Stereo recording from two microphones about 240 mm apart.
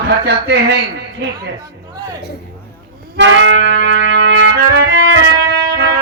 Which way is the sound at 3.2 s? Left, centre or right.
Right.